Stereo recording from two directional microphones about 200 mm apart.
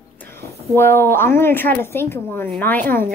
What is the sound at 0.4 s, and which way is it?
A woman's voice, 10° left (ahead or behind).